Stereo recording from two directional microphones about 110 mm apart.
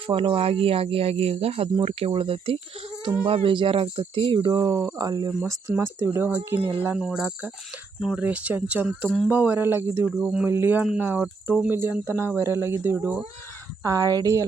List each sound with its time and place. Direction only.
0.1 s speech: 50° right (ahead or behind)
5.4 s speech: 20° right (ahead or behind)
6.8 s speech: 10° right (ahead or behind)
10.2 s speech: 5° right (ahead or behind)
10.4 s speech: 20° right (ahead or behind)